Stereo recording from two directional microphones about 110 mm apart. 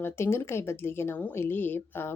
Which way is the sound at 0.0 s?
20° left (ahead or behind).